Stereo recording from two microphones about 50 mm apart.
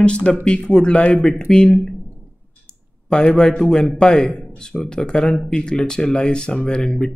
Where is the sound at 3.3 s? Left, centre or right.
Centre.